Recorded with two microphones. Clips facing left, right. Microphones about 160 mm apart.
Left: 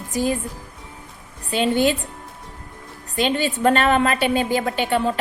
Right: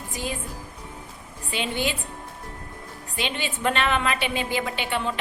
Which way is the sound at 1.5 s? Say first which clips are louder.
Left 9 dB; 45° left (ahead or behind).